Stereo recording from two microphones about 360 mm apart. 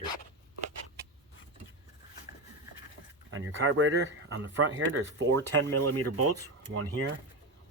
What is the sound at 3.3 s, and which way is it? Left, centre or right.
Speech, right.